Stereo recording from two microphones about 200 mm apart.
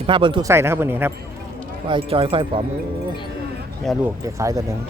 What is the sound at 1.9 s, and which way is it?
Speech, 25° right (ahead or behind).